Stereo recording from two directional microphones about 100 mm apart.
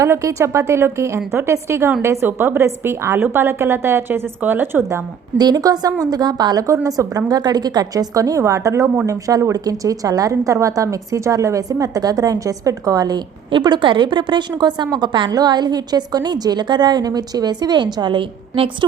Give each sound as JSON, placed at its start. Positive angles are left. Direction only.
{"t": 0.0, "sound": "a woman's voice", "side_deg": -30}
{"t": 5.4, "sound": "a woman's voice", "side_deg": -40}